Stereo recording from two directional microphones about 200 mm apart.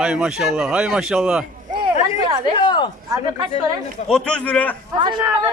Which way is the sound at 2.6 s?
20° left (ahead or behind).